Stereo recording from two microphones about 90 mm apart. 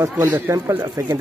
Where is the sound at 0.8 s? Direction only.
50° right (ahead or behind).